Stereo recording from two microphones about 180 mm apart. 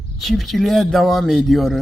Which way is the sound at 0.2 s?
Centre (ahead or behind).